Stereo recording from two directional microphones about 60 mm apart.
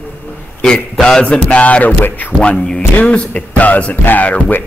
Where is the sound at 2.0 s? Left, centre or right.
Left.